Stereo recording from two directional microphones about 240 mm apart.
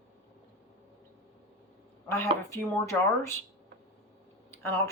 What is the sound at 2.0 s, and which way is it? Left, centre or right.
Speech, centre.